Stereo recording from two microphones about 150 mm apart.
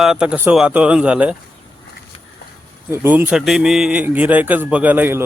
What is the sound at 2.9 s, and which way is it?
A man's voice, 10° right (ahead or behind).